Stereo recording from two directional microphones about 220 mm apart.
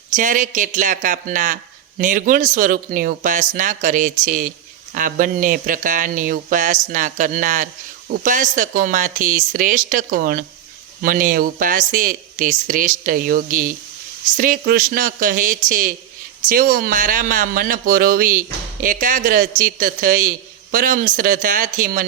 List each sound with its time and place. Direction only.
0.1 s speech: 35° right (ahead or behind)